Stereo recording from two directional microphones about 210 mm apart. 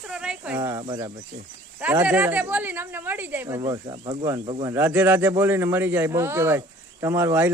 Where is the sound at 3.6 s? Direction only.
20° right (ahead or behind).